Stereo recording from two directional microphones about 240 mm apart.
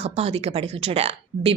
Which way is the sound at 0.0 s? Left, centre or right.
Right.